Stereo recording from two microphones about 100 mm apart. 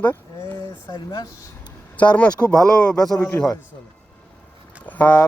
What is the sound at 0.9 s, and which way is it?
Speech, 40° left (ahead or behind).